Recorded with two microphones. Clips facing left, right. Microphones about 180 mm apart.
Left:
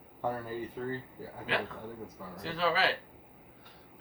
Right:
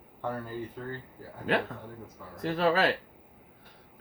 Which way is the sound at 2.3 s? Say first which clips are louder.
Right 5 dB; 50° right (ahead or behind).